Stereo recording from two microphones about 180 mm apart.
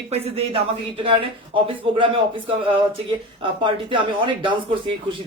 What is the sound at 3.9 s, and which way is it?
Speech, 25° right (ahead or behind).